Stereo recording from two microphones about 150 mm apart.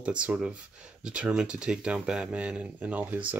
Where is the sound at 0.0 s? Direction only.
10° right (ahead or behind).